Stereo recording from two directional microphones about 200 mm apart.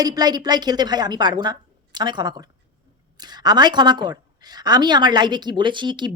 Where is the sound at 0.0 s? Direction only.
20° right (ahead or behind).